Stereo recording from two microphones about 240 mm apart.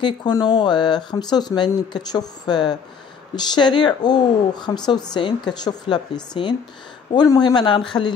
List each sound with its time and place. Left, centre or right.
0.0 s speech: centre